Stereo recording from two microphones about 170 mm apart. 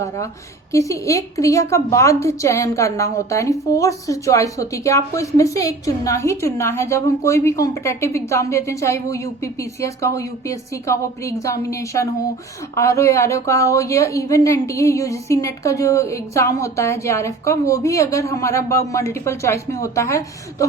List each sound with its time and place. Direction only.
0.7 s a woman's voice: 20° left (ahead or behind)